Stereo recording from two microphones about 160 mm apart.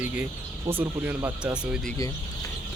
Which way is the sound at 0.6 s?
15° right (ahead or behind).